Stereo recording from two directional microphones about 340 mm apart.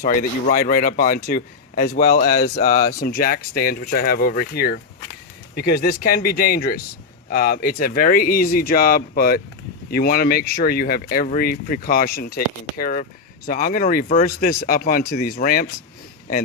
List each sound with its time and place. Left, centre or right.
0.0 s speech: left